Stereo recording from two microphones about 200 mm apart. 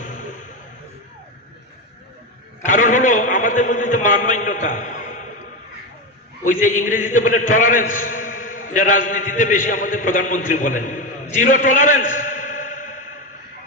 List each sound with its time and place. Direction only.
0.0 s a sound: 40° left (ahead or behind)
2.6 s a man's voice: 40° left (ahead or behind)
6.4 s a man's voice: 40° left (ahead or behind)